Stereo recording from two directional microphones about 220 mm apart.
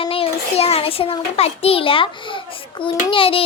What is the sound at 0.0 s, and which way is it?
A child's voice, 25° left (ahead or behind).